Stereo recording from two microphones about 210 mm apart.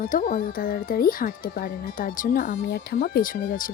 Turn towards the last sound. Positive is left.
turn(degrees=40)  # may be behind; listen again after turning